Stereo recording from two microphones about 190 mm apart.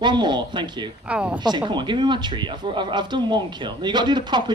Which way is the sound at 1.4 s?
25° right (ahead or behind).